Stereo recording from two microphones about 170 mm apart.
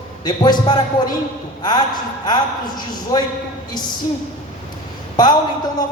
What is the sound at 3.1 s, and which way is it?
Speech, 20° left (ahead or behind).